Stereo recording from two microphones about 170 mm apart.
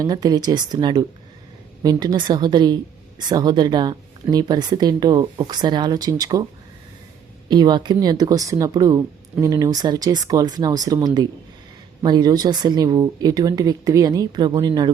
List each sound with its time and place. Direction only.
0.0 s speech: 20° right (ahead or behind)
7.4 s speech: 25° right (ahead or behind)